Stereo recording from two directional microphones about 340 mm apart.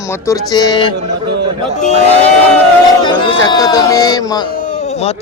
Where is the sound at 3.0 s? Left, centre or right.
Centre.